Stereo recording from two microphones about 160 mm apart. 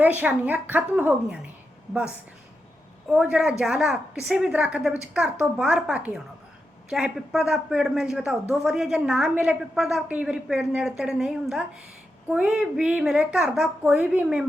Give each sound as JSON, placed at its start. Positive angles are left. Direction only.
{"t": 0.0, "sound": "a woman's voice", "side_deg": -10}
{"t": 3.1, "sound": "a woman's voice", "side_deg": -5}